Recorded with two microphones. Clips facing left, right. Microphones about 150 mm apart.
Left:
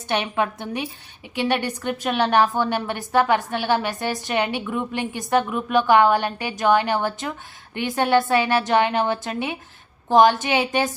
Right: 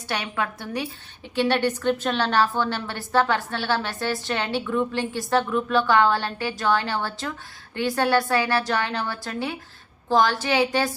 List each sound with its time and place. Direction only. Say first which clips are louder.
0.1 s a woman's voice: left 5 dB; 20° left (ahead or behind)